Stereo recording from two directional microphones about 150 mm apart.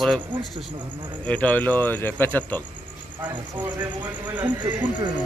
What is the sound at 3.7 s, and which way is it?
Speech, 10° right (ahead or behind).